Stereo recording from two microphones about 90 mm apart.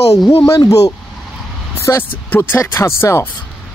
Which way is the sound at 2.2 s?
20° left (ahead or behind).